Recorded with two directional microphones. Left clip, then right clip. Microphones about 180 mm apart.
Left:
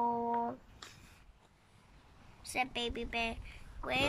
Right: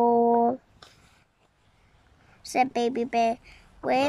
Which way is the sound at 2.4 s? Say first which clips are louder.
Right 12 dB; 30° right (ahead or behind).